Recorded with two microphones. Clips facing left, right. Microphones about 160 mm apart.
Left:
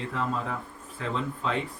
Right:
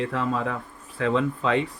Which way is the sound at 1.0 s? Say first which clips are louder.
Right 8 dB; 70° right (ahead or behind).